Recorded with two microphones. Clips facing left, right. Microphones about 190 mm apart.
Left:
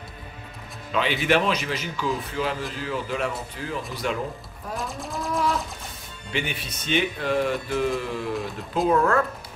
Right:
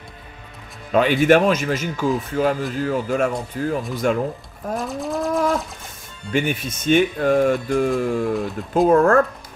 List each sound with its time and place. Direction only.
0.9 s speech: 45° right (ahead or behind)
4.7 s a sound: centre (ahead or behind)
6.3 s speech: 45° right (ahead or behind)